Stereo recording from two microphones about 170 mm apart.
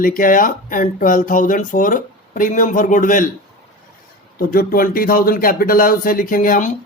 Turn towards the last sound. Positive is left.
turn(degrees=50)  # may be behind; listen again after turning